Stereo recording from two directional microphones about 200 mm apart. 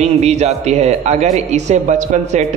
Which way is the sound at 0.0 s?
35° right (ahead or behind).